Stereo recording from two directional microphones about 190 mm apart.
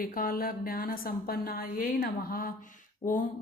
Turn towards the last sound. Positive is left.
turn(degrees=40)  # may be behind; listen again after turning